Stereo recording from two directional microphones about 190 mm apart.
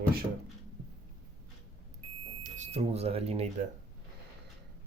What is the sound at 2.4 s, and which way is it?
Speech, 35° right (ahead or behind).